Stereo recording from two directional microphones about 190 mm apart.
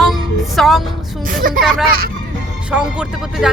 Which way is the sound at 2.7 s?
5° right (ahead or behind).